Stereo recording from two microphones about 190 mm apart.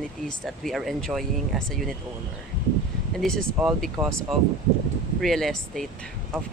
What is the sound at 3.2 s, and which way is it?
Speech, centre (ahead or behind).